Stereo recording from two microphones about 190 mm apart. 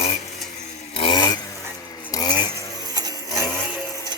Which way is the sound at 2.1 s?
20° left (ahead or behind).